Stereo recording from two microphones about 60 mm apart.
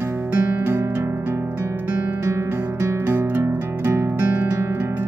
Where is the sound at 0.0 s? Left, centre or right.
Right.